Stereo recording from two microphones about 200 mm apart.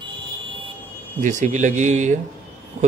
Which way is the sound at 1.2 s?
35° right (ahead or behind).